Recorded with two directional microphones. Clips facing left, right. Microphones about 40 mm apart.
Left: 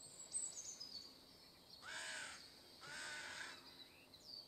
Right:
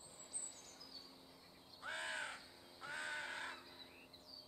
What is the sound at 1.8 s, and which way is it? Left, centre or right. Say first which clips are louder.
Crow: right 6 dB; right.